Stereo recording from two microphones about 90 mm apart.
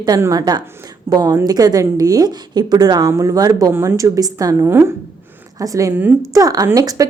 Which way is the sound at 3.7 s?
30° right (ahead or behind).